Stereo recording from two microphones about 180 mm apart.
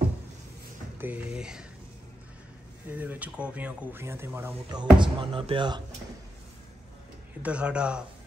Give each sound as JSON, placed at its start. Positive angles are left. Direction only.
{"t": 0.9, "sound": "speech", "side_deg": -10}
{"t": 2.9, "sound": "speech", "side_deg": -10}
{"t": 4.6, "sound": "speech", "side_deg": -25}
{"t": 7.4, "sound": "speech", "side_deg": -5}